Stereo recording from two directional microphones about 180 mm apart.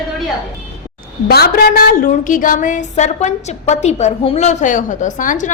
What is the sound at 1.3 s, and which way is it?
A woman's voice, 60° left (ahead or behind).